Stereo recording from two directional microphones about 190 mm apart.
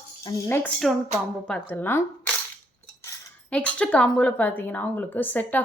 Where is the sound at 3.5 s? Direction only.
5° left (ahead or behind).